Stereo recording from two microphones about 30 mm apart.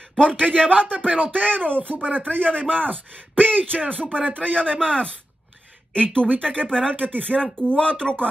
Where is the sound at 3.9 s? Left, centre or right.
Left.